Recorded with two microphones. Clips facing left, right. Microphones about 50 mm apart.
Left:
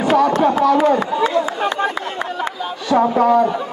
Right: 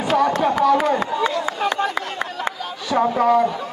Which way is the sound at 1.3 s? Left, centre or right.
Left.